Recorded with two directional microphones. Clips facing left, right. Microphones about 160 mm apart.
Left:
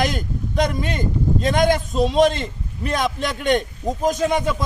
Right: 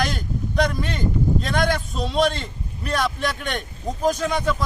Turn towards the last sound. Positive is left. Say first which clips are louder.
# left 2 dB
turn(degrees=20)  # may be behind; listen again after turning